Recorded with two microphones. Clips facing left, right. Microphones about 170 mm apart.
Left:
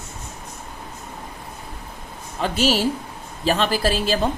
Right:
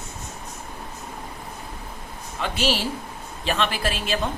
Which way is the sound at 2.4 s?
40° left (ahead or behind).